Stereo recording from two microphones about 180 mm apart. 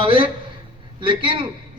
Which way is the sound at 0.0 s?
30° right (ahead or behind).